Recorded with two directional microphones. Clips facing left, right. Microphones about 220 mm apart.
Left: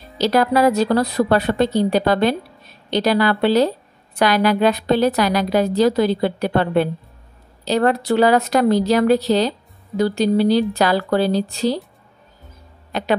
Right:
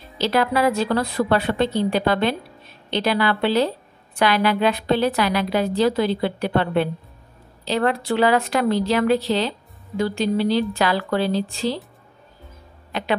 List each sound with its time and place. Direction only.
0.2 s speech: 40° left (ahead or behind)